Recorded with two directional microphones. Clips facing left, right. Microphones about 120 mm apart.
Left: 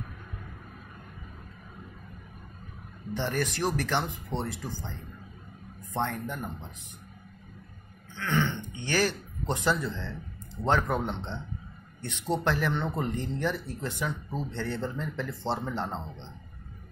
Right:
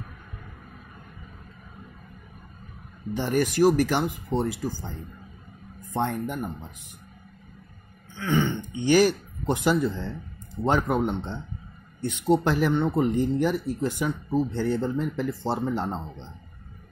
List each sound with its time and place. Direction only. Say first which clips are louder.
3.2 s speech: right 8 dB; 10° right (ahead or behind)
5.9 s speech: right 4 dB; 15° right (ahead or behind)
8.2 s throat clearing: right 4 dB; 10° right (ahead or behind)
8.7 s speech: right 9 dB; 15° right (ahead or behind)